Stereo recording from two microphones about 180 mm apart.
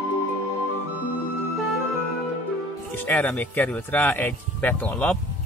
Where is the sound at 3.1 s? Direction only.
10° left (ahead or behind).